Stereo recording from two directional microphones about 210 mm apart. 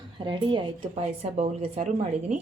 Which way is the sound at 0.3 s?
20° right (ahead or behind).